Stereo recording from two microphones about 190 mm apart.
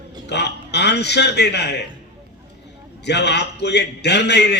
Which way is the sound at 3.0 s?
65° left (ahead or behind).